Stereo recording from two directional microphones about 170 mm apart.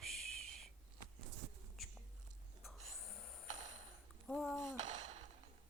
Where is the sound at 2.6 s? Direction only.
Centre (ahead or behind).